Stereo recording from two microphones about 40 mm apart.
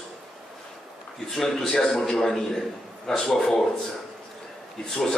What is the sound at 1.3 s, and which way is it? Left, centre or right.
A man's voice, centre.